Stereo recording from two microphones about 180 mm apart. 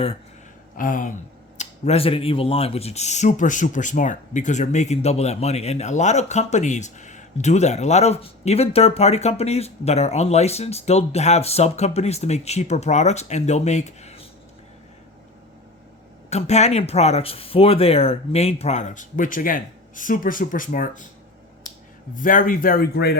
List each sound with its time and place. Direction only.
0.8 s speech: 50° left (ahead or behind)
1.5 s speech: 35° left (ahead or behind)
16.3 s speech: 40° left (ahead or behind)
22.1 s speech: 50° left (ahead or behind)